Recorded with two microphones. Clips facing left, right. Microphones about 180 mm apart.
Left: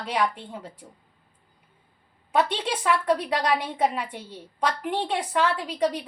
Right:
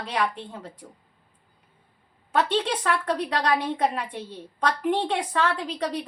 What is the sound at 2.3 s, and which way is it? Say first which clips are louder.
A woman's voice: right 1 dB; 10° left (ahead or behind).